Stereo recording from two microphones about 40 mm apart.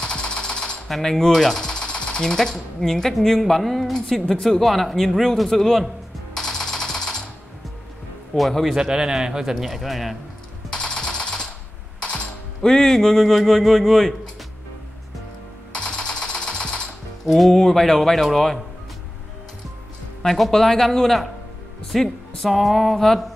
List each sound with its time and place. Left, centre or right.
0.0 s jackhammer: left
0.8 s a man's voice: centre
6.3 s music: centre
8.4 s a man's voice: centre
8.6 s speech: centre
9.6 s a man's voice: centre
10.7 s jackhammer: centre
12.0 s music: left
12.6 s a man's voice: centre
15.7 s jackhammer: left
17.3 s speech: centre
20.2 s speech: centre
22.5 s a man's voice: centre